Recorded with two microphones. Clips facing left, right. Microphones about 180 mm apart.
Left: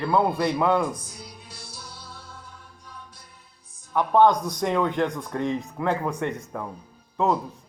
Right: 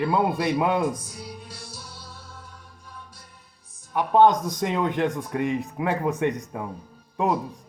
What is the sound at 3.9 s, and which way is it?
Speech, 20° right (ahead or behind).